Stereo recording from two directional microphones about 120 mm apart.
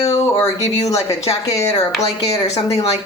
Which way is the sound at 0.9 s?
25° left (ahead or behind).